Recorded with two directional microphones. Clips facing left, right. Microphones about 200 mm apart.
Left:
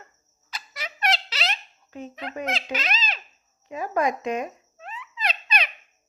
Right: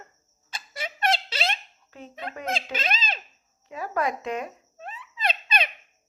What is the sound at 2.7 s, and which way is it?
Speech, 25° right (ahead or behind).